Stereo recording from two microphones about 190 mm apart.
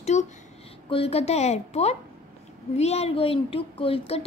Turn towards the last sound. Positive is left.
turn(degrees=30)  # may be behind; listen again after turning